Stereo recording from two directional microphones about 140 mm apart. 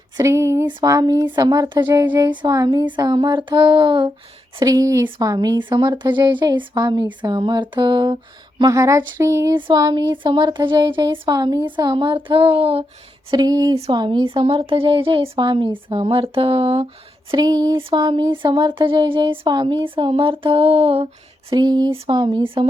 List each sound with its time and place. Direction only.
0.2 s speech: 20° right (ahead or behind)
8.7 s speech: 20° right (ahead or behind)
9.6 s speech: 30° right (ahead or behind)
13.3 s speech: 25° right (ahead or behind)
17.3 s speech: 30° right (ahead or behind)
21.5 s speech: 30° right (ahead or behind)